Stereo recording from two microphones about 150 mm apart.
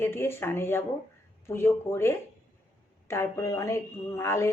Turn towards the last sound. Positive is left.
turn(degrees=20)  # may be behind; listen again after turning